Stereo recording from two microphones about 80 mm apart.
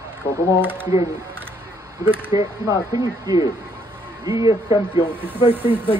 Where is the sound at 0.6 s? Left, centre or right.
Right.